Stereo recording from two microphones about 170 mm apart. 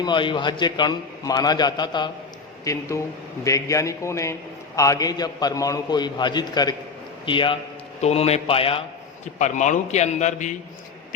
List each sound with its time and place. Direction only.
0.0 s a man's voice: 30° left (ahead or behind)
9.4 s a man's voice: 45° left (ahead or behind)